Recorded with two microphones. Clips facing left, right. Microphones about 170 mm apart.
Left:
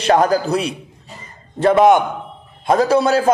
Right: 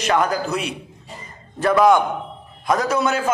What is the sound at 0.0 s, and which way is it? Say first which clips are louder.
A man's voice: left 5 dB; 35° left (ahead or behind).